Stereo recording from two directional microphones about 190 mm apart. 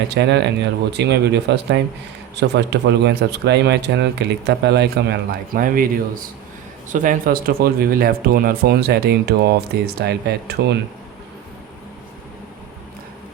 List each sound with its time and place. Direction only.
0.1 s speech: 65° right (ahead or behind)
5.5 s speech: 50° right (ahead or behind)